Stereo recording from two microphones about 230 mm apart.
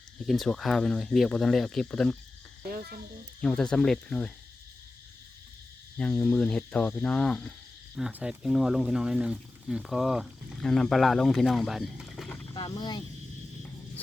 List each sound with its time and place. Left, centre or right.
0.3 s speech: centre
2.6 s cricket: right
3.4 s speech: centre
6.0 s speech: centre
12.5 s speech: centre